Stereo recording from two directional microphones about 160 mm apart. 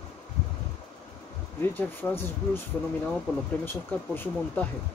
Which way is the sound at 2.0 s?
10° left (ahead or behind).